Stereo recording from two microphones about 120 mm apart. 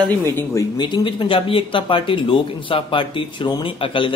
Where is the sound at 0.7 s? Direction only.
40° left (ahead or behind).